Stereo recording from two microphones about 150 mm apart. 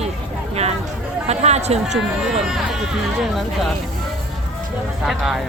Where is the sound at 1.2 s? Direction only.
45° right (ahead or behind).